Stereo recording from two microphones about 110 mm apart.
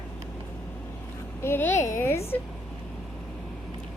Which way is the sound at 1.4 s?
20° left (ahead or behind).